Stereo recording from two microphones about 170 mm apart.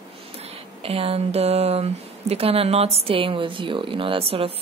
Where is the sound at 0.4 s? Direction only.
35° right (ahead or behind).